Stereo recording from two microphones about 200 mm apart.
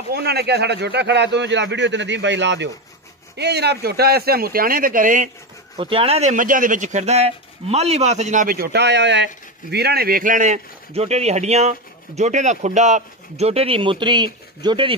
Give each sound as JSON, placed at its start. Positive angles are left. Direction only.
{"t": 0.1, "sound": "speech", "side_deg": -55}
{"t": 5.8, "sound": "speech", "side_deg": -25}